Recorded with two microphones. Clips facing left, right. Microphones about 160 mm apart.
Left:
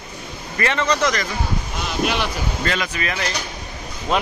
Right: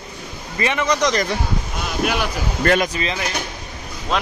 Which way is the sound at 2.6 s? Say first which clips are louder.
Right 8 dB; 50° right (ahead or behind).